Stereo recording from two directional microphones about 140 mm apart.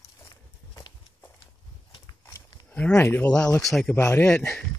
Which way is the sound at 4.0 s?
20° left (ahead or behind).